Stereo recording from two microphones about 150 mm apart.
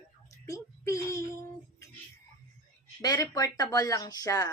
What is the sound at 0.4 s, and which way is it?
Speech, 20° left (ahead or behind).